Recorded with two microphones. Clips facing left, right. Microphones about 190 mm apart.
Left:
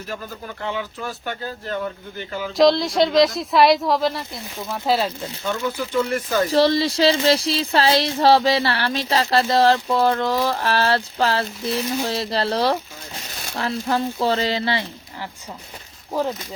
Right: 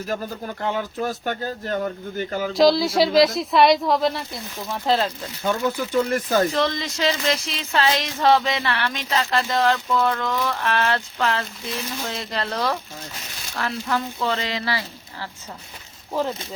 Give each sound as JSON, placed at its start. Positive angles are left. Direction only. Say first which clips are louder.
{"t": 0.1, "sound": "speech", "louder": "right 4 dB", "side_deg": -45}
{"t": 2.5, "sound": "speech", "louder": "left 1 dB", "side_deg": 0}
{"t": 5.4, "sound": "speech", "louder": "right 2 dB", "side_deg": -40}
{"t": 6.5, "sound": "speech", "louder": "left 6 dB", "side_deg": 35}